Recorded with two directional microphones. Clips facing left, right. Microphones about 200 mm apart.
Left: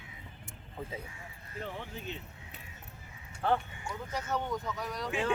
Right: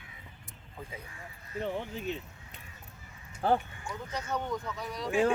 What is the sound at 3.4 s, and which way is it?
Speech, 35° right (ahead or behind).